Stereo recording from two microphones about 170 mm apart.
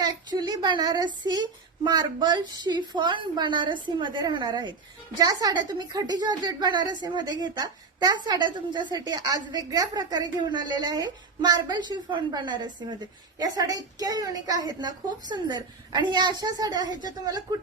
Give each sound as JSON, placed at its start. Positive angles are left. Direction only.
{"t": 0.0, "sound": "a woman's voice", "side_deg": -25}